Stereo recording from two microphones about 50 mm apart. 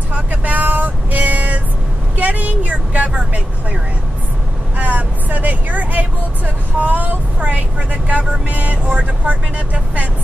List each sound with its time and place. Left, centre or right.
0.1 s vehicle: right
4.7 s speech: right